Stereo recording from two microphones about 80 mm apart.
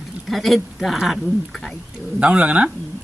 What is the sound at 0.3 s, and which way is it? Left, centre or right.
Speech, centre.